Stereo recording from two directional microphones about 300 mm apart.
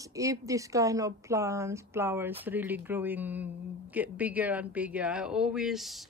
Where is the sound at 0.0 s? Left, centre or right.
Centre.